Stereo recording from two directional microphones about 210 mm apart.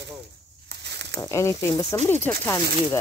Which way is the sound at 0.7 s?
55° right (ahead or behind).